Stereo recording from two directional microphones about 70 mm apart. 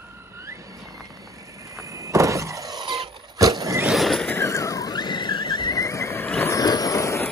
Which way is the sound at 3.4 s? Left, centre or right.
Right.